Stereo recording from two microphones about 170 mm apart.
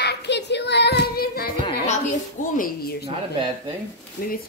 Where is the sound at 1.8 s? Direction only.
45° left (ahead or behind).